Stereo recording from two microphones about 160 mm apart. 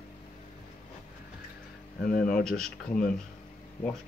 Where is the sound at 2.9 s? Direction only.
60° left (ahead or behind).